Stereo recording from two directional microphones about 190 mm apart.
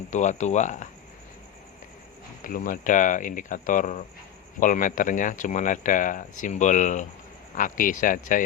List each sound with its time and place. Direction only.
0.1 s speech: 40° left (ahead or behind)
2.4 s speech: 45° left (ahead or behind)